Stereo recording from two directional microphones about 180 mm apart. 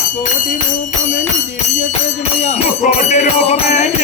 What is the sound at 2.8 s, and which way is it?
Jingle bell, 45° left (ahead or behind).